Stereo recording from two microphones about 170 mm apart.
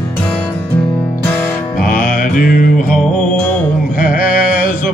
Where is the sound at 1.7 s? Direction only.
55° left (ahead or behind).